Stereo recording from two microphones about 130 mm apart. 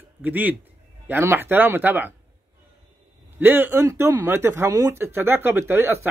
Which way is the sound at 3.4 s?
15° right (ahead or behind).